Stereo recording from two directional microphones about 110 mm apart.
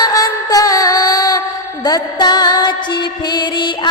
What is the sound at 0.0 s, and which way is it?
Music, 35° left (ahead or behind).